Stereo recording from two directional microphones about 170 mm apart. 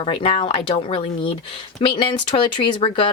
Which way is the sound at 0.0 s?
30° left (ahead or behind).